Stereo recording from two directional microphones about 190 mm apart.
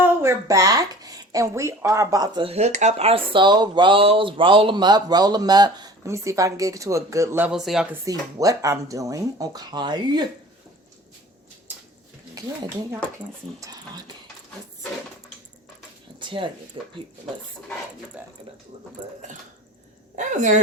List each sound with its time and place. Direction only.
0.0 s speech: 15° right (ahead or behind)
8.4 s speech: 15° right (ahead or behind)
12.3 s speech: 15° right (ahead or behind)
18.2 s speech: 10° right (ahead or behind)
20.1 s a woman's voice: 40° right (ahead or behind)